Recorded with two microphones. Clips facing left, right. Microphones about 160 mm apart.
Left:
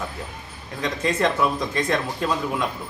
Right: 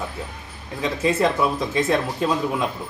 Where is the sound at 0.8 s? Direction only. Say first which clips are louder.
Right 2 dB; 5° right (ahead or behind).